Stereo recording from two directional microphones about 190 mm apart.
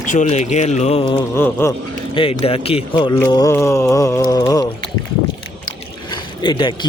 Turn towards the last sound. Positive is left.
turn(degrees=25)  # may be behind; listen again after turning